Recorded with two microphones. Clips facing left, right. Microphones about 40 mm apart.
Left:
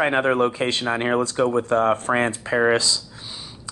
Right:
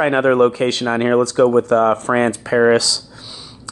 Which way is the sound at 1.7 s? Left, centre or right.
Right.